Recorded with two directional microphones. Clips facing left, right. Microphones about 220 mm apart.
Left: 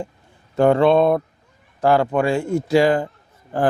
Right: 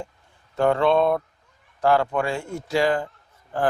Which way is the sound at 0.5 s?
10° left (ahead or behind).